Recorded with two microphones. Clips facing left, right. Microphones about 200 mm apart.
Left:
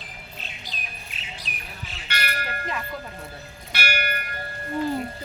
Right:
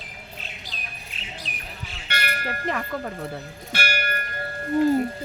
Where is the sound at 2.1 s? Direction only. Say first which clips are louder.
Right 2 dB; 60° right (ahead or behind).